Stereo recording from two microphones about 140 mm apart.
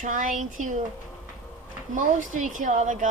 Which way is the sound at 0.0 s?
70° right (ahead or behind).